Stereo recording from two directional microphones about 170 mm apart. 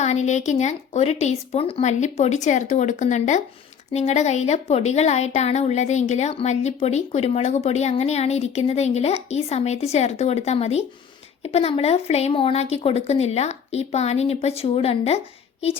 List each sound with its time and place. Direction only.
0.0 s speech: 40° left (ahead or behind)